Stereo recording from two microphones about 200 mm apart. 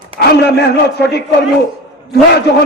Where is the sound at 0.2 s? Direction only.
55° left (ahead or behind).